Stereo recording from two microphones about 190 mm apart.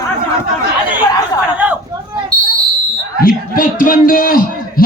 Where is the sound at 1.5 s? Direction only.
10° right (ahead or behind).